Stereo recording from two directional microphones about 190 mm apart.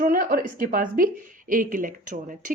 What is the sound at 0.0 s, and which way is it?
A woman's voice, 50° right (ahead or behind).